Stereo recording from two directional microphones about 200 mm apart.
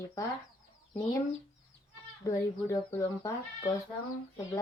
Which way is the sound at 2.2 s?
15° left (ahead or behind).